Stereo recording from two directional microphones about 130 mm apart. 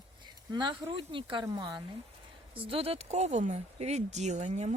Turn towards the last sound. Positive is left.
turn(degrees=-65)  # may be behind; listen again after turning